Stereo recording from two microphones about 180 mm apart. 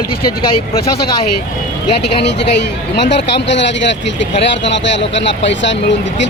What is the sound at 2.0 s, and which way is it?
Speech, 70° left (ahead or behind).